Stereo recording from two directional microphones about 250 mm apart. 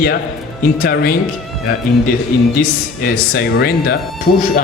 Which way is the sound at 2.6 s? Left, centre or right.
Left.